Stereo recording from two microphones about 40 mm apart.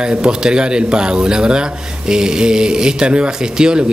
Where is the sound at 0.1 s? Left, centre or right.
Centre.